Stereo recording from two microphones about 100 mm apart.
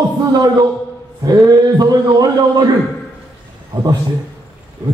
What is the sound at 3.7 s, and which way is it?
Speech, 45° right (ahead or behind).